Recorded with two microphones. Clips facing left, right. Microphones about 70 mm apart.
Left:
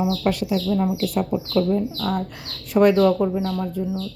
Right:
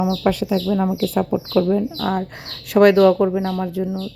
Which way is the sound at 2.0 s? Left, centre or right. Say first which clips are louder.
Right 3 dB; right.